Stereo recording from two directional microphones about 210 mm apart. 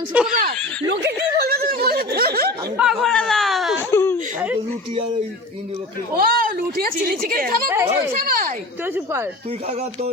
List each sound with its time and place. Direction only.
0.1 s speech: 5° right (ahead or behind)
1.0 s a sound: 45° right (ahead or behind)
2.7 s a sound: centre (ahead or behind)
3.8 s baby cry: 10° left (ahead or behind)
6.1 s speech: 45° right (ahead or behind)
7.7 s speech: 10° right (ahead or behind)
8.2 s speech: 40° right (ahead or behind)
8.8 s speech: 10° right (ahead or behind)